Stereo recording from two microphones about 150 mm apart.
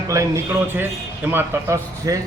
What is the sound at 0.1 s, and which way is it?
A man's voice, 20° right (ahead or behind).